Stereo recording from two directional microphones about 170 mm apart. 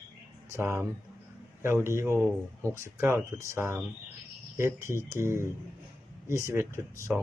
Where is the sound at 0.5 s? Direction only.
15° right (ahead or behind).